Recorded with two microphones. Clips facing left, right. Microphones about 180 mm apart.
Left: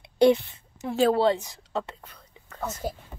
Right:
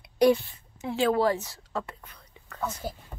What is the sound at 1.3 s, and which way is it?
Whispering, 20° left (ahead or behind).